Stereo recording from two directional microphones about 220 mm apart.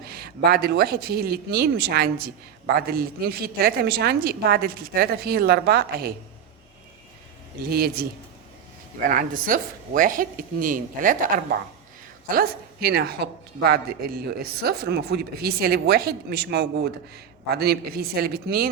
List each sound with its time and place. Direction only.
0.0 s speech: 45° right (ahead or behind)
7.6 s speech: 45° right (ahead or behind)
9.0 s a woman's voice: 40° right (ahead or behind)
12.3 s speech: 45° right (ahead or behind)